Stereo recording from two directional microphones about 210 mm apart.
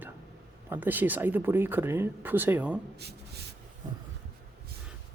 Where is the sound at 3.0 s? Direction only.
50° right (ahead or behind).